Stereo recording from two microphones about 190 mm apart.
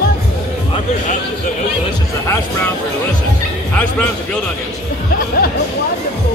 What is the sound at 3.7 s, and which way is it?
Speech, 5° left (ahead or behind).